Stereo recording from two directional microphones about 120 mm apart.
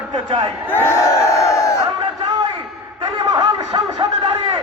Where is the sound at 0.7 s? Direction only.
20° left (ahead or behind).